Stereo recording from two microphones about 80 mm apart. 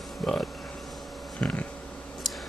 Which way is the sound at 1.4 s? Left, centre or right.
Centre.